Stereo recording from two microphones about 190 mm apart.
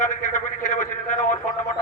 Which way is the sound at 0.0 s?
40° left (ahead or behind).